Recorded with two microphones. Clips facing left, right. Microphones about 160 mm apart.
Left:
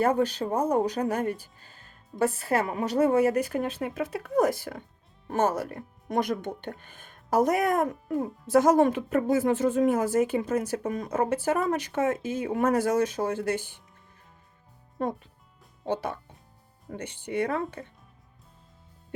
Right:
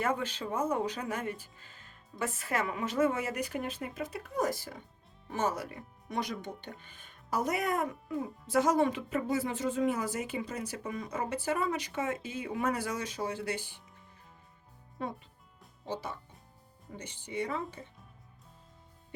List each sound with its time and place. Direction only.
0.0 s speech: 40° left (ahead or behind)
15.0 s speech: 50° left (ahead or behind)
15.9 s speech: 60° left (ahead or behind)